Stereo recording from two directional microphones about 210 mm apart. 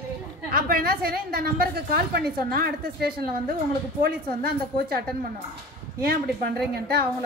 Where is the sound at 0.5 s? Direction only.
45° right (ahead or behind).